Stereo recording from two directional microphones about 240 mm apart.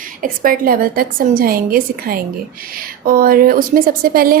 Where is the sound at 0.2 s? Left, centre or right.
Right.